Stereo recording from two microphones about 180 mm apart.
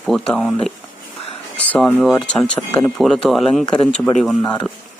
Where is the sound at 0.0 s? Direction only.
5° left (ahead or behind).